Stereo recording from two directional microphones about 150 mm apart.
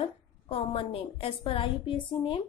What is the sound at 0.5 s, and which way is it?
A woman's voice, 40° left (ahead or behind).